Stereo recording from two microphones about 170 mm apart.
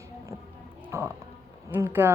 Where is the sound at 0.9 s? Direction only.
15° right (ahead or behind).